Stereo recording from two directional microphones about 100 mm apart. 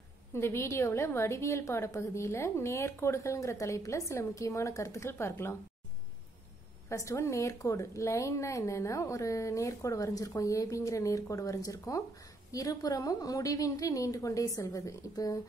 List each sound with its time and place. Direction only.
0.3 s a woman's voice: 25° left (ahead or behind)
6.9 s speech: 30° left (ahead or behind)